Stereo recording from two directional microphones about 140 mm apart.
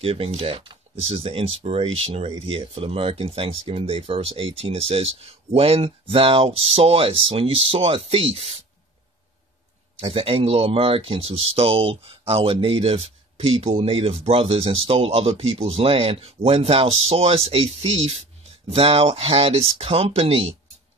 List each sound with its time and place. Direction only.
0.0 s speech: 45° right (ahead or behind)
9.9 s speech: 45° right (ahead or behind)